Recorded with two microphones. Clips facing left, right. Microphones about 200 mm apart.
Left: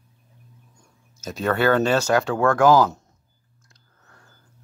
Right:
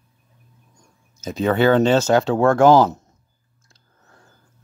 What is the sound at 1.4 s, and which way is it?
Speech, 20° right (ahead or behind).